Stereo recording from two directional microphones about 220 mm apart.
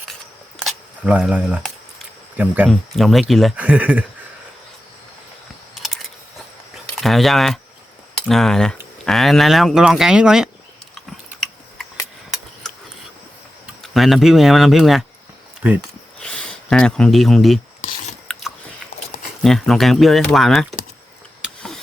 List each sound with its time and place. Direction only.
0.6 s camera: 5° right (ahead or behind)
2.4 s speech: 5° right (ahead or behind)
5.7 s a sound: centre (ahead or behind)
7.0 s speech: centre (ahead or behind)
13.8 s speech: centre (ahead or behind)
16.1 s speech: 5° left (ahead or behind)
17.8 s rub: 40° left (ahead or behind)
18.3 s biting: 5° left (ahead or behind)
19.4 s speech: centre (ahead or behind)
21.4 s a sound: centre (ahead or behind)